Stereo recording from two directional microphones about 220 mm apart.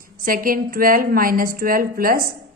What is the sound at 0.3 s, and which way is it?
A woman's voice, 40° right (ahead or behind).